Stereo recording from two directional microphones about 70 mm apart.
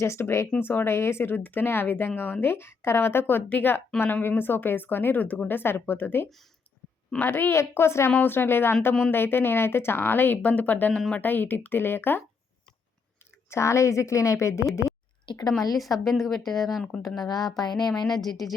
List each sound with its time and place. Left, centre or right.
0.0 s speech: left
13.5 s a woman's voice: left
15.3 s speech: left
16.0 s speech: centre
17.2 s speech: left
17.6 s speech: left
18.2 s speech: centre